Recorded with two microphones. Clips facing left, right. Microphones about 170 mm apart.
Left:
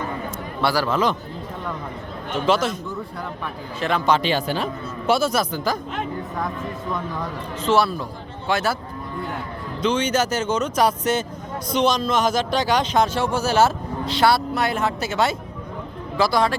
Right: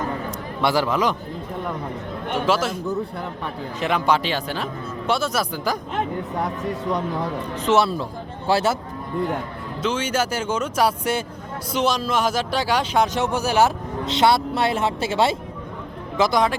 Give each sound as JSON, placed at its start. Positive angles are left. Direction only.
{"t": 0.6, "sound": "a man's voice", "side_deg": -20}
{"t": 2.3, "sound": "speech", "side_deg": -5}
{"t": 3.8, "sound": "speech", "side_deg": -15}
{"t": 5.4, "sound": "a man's voice", "side_deg": -10}
{"t": 7.6, "sound": "a man's voice", "side_deg": -20}
{"t": 9.8, "sound": "a man's voice", "side_deg": -5}